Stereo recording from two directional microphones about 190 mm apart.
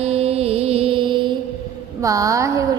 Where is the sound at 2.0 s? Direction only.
15° right (ahead or behind).